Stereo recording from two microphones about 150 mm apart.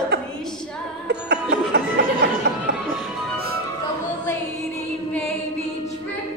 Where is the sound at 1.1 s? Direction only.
90° right.